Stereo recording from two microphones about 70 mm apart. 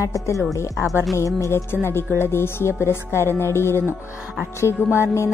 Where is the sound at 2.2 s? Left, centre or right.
Left.